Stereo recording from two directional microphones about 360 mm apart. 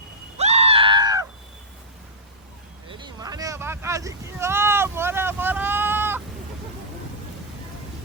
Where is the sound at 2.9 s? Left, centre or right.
Centre.